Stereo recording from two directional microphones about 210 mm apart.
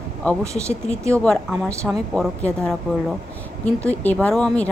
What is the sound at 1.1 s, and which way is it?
A woman's voice, 5° left (ahead or behind).